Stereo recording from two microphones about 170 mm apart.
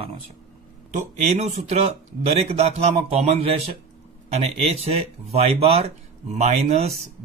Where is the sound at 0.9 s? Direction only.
45° right (ahead or behind).